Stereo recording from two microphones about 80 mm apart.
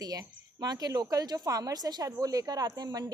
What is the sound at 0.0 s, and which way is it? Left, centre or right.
A woman's voice, right.